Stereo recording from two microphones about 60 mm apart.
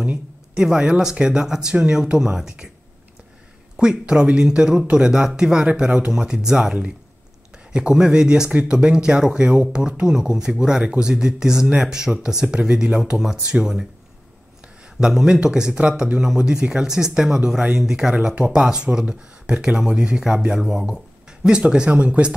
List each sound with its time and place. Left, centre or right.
0.6 s speech: centre
3.7 s speech: centre
6.1 s speech: centre